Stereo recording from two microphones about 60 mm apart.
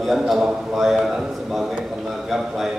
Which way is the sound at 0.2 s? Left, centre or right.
Centre.